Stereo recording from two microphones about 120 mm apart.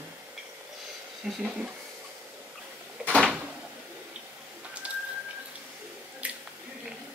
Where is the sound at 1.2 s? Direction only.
Centre (ahead or behind).